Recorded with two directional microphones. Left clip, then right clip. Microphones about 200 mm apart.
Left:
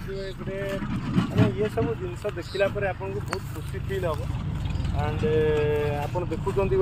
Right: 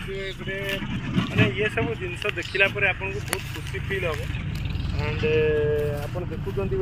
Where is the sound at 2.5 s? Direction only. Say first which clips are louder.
Right 4 dB; 40° left (ahead or behind).